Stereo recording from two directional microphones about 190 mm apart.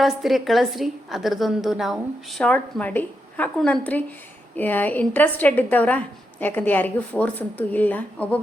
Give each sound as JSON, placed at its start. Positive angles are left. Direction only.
{"t": 0.0, "sound": "a woman's voice", "side_deg": 0}